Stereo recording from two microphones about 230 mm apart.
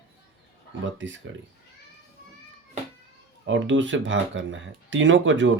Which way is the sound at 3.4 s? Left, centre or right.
Right.